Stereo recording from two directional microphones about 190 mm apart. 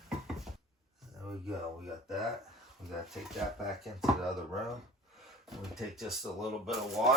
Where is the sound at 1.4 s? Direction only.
Centre (ahead or behind).